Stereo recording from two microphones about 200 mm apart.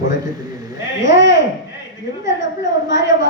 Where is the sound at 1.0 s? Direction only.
65° left (ahead or behind).